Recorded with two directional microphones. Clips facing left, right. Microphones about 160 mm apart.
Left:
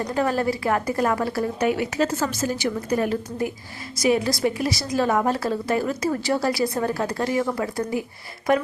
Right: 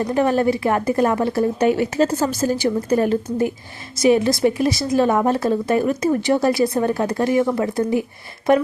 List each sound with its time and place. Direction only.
0.0 s a woman's voice: 20° right (ahead or behind)